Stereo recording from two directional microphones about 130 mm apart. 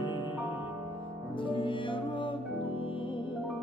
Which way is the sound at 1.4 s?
40° left (ahead or behind).